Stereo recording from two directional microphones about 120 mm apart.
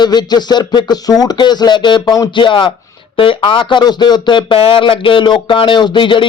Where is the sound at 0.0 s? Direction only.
35° left (ahead or behind).